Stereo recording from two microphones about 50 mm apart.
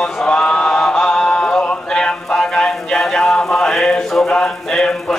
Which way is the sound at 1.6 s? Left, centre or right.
Left.